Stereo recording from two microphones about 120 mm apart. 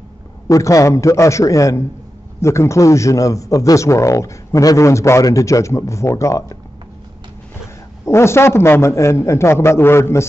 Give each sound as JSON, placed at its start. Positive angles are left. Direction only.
{"t": 0.5, "sound": "a man's voice", "side_deg": 25}
{"t": 8.0, "sound": "a man's voice", "side_deg": 20}